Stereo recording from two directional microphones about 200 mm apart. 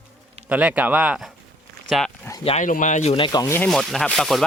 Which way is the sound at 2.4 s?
35° left (ahead or behind).